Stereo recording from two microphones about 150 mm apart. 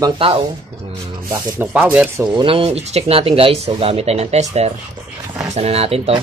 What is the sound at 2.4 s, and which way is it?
Speech, 40° right (ahead or behind).